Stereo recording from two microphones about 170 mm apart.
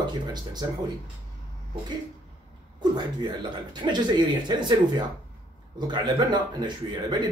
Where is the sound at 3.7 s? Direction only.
25° right (ahead or behind).